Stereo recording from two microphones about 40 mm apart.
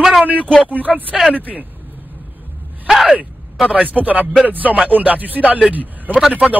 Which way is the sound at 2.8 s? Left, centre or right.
Centre.